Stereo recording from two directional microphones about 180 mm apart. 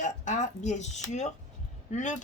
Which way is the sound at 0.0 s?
45° left (ahead or behind).